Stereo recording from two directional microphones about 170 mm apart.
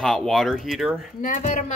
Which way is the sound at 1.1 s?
50° left (ahead or behind).